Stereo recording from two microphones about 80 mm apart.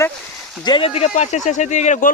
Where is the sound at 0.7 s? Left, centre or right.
Left.